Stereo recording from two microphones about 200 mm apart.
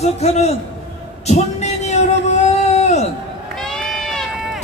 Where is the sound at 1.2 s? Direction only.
35° left (ahead or behind).